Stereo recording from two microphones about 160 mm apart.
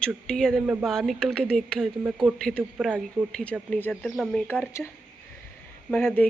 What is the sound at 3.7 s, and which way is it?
Speech, 10° left (ahead or behind).